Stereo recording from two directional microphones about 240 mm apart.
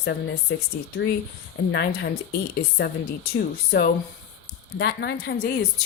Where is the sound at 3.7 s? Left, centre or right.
Left.